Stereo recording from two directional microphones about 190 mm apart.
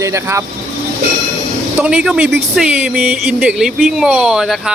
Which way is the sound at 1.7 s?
5° right (ahead or behind).